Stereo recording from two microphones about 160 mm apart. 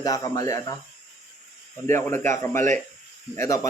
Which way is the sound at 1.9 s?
15° left (ahead or behind).